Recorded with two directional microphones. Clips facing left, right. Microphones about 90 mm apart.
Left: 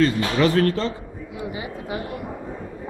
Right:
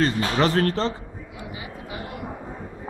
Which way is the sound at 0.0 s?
30° right (ahead or behind).